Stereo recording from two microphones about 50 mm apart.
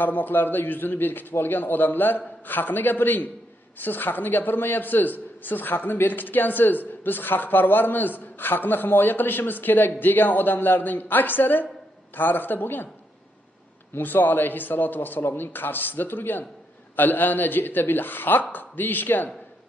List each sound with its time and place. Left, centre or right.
0.0 s a man's voice: left
13.9 s a man's voice: left